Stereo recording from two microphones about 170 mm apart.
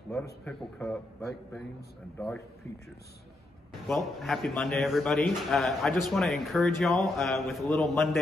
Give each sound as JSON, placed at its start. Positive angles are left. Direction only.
{"t": 0.5, "sound": "speech", "side_deg": 5}
{"t": 3.8, "sound": "speech", "side_deg": 0}